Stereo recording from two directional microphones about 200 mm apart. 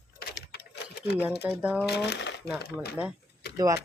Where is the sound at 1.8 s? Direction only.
55° left (ahead or behind).